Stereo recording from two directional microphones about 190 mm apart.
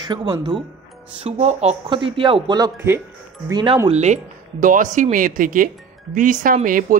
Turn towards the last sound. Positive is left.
turn(degrees=-45)  # may be behind; listen again after turning